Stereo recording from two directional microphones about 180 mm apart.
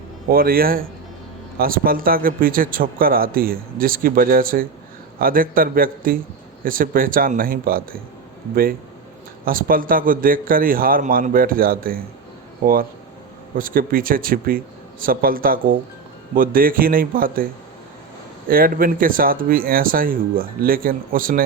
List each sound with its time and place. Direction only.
0.3 s a man's voice: 55° right (ahead or behind)
9.4 s speech: 50° right (ahead or behind)
13.6 s speech: 50° right (ahead or behind)
18.4 s speech: 55° right (ahead or behind)